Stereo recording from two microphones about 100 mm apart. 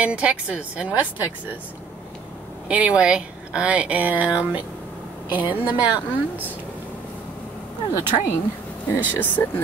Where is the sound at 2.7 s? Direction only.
10° right (ahead or behind).